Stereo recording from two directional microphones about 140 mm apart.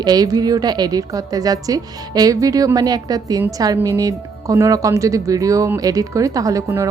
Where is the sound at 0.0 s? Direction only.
30° right (ahead or behind).